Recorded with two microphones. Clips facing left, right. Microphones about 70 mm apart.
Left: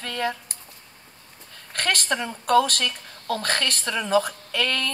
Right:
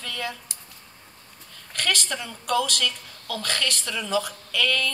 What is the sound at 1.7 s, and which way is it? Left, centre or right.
A woman's voice, left.